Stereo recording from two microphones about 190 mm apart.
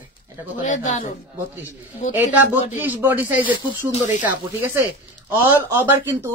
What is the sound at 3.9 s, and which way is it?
Speech, 40° left (ahead or behind).